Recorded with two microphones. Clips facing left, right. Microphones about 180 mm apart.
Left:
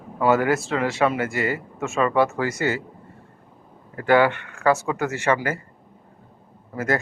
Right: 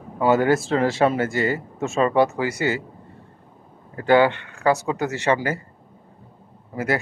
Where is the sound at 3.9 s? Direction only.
25° right (ahead or behind).